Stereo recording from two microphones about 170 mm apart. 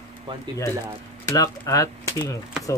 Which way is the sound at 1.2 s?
20° left (ahead or behind).